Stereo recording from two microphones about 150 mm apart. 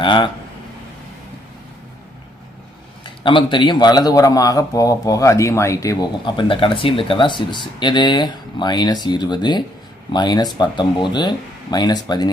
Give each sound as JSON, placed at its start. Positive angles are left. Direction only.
{"t": 0.0, "sound": "speech", "side_deg": 35}
{"t": 3.0, "sound": "a man's voice", "side_deg": 35}